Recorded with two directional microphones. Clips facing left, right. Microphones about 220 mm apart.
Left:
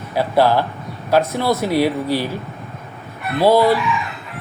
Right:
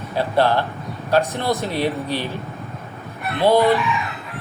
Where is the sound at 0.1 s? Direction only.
10° left (ahead or behind).